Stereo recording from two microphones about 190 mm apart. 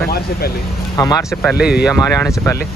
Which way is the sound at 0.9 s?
15° left (ahead or behind).